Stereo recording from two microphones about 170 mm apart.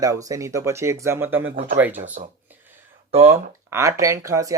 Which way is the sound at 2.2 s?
55° right (ahead or behind).